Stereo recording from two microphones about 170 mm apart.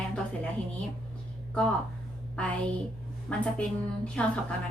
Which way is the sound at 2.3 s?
5° left (ahead or behind).